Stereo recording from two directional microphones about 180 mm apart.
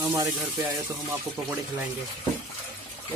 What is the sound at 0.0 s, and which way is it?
Speech, 20° right (ahead or behind).